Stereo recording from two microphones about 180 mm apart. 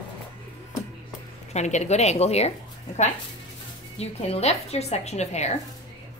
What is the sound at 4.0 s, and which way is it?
A woman's voice, 35° left (ahead or behind).